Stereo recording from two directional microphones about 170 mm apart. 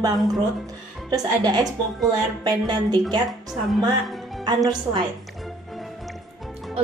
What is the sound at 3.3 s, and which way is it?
Speech, centre (ahead or behind).